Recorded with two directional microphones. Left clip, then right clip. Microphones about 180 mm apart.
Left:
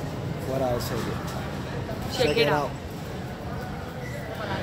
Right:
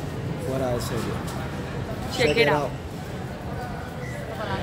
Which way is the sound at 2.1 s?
15° right (ahead or behind).